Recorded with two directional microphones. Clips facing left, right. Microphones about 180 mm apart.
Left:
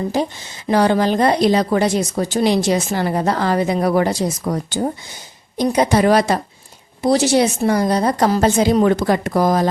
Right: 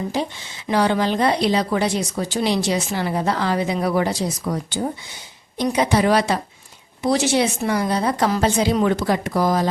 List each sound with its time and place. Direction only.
0.1 s a woman's voice: 45° left (ahead or behind)